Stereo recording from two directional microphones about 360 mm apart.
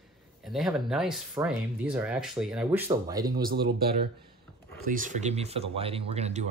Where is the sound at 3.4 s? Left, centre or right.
Right.